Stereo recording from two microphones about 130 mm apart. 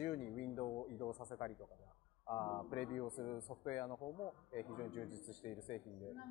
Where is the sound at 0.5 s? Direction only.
25° left (ahead or behind).